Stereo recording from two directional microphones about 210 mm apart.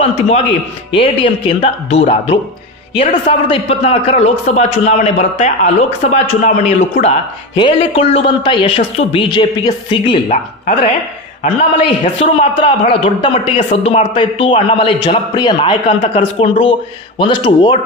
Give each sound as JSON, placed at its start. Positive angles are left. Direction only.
{"t": 0.9, "sound": "a man's voice", "side_deg": 25}
{"t": 10.3, "sound": "a man's voice", "side_deg": 35}
{"t": 12.0, "sound": "a man's voice", "side_deg": 30}